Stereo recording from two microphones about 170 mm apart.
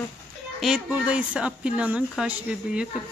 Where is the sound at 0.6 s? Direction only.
5° right (ahead or behind).